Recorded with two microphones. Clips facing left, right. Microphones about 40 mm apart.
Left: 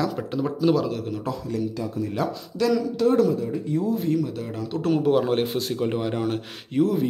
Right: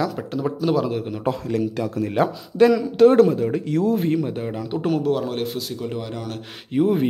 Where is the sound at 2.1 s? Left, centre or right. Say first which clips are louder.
Right 11 dB; right.